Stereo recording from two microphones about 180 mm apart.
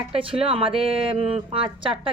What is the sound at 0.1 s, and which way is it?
Speech, 30° right (ahead or behind).